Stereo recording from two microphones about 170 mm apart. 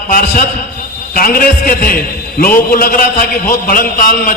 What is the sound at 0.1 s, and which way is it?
A man's voice, 55° left (ahead or behind).